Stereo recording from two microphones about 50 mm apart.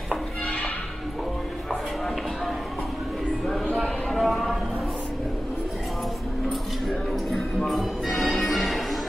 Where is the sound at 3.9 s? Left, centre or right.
Centre.